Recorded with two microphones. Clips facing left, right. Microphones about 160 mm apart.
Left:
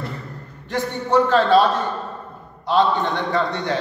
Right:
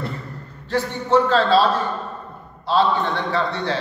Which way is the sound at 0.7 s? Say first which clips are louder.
Right 1 dB; 15° left (ahead or behind).